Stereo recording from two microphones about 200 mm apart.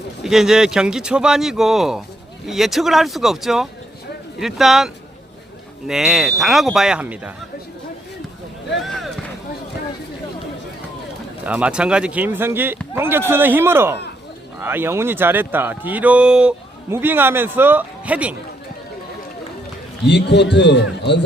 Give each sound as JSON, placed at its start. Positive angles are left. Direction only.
{"t": 0.2, "sound": "speech", "side_deg": 0}
{"t": 5.9, "sound": "speech", "side_deg": 0}
{"t": 8.8, "sound": "a sound", "side_deg": 0}
{"t": 11.4, "sound": "a man's voice", "side_deg": -5}
{"t": 20.1, "sound": "a man's voice", "side_deg": 60}